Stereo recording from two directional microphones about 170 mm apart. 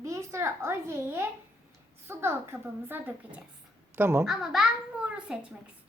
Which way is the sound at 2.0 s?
15° right (ahead or behind).